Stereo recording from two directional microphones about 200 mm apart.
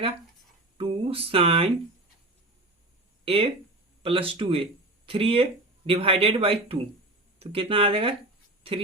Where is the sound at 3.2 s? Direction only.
30° right (ahead or behind).